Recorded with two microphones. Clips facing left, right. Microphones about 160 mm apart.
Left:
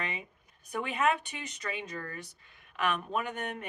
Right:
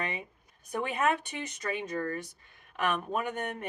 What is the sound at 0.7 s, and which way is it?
Speech, 40° right (ahead or behind).